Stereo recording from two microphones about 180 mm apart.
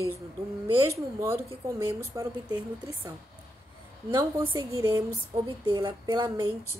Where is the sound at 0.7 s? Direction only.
25° right (ahead or behind).